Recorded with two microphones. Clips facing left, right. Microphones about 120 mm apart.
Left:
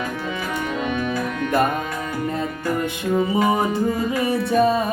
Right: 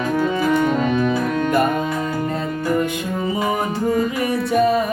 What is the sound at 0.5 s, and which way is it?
Organ, 40° right (ahead or behind).